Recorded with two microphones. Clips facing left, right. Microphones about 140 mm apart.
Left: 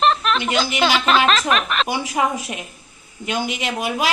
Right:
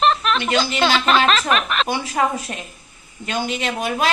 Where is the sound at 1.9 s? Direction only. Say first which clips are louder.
Right 1 dB; 15° left (ahead or behind).